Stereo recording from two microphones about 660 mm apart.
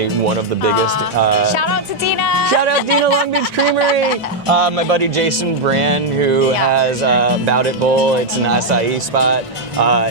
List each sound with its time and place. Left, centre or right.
2.9 s speech: left
4.4 s speech: right